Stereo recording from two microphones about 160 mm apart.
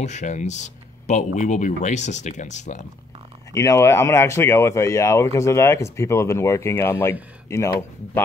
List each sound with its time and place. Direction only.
0.0 s speech: 50° left (ahead or behind)
3.5 s speech: 20° left (ahead or behind)